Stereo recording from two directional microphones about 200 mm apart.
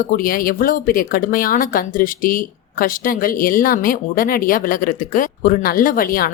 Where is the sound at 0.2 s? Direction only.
45° left (ahead or behind).